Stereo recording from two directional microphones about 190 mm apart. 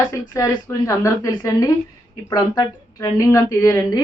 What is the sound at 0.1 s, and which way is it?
A woman's voice, 15° left (ahead or behind).